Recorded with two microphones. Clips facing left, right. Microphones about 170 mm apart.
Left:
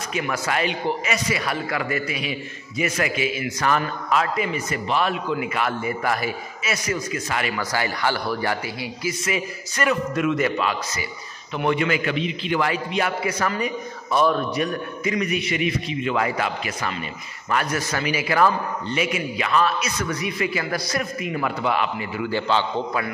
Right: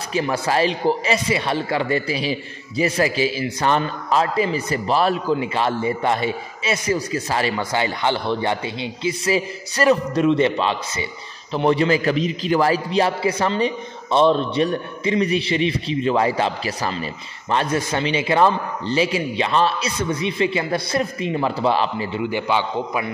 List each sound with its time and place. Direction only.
0.1 s a man's voice: 30° right (ahead or behind)
22.3 s a man's voice: 15° right (ahead or behind)